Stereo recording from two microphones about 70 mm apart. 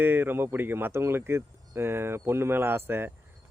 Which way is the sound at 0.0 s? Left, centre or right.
Right.